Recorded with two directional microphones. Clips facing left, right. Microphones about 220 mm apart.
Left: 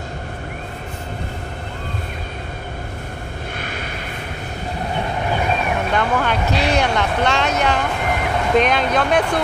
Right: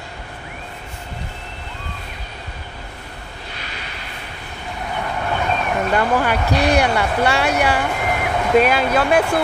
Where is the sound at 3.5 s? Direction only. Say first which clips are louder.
Left 6 dB; 50° left (ahead or behind).